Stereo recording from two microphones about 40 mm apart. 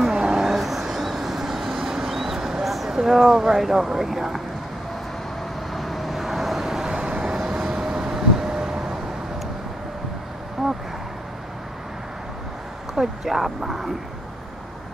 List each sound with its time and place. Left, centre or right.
0.2 s a sound: centre
0.5 s vehicle: centre
2.7 s speech: centre
5.7 s vehicle: centre; by 7.3 s right
7.3 s vehicle: centre
10.6 s a sound: centre
12.9 s speech: centre